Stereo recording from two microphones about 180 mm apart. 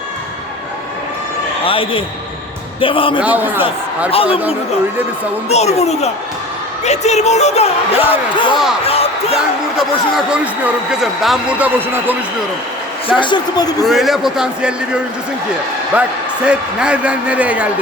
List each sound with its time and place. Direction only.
1.6 s speech: 30° left (ahead or behind)
3.2 s a man's voice: 10° right (ahead or behind)
5.5 s speech: 35° left (ahead or behind)
8.8 s a sound: 35° left (ahead or behind)
10.2 s a man's voice: 5° right (ahead or behind)
13.1 s speech: 25° left (ahead or behind)
13.8 s a man's voice: centre (ahead or behind)
15.9 s a man's voice: 10° right (ahead or behind)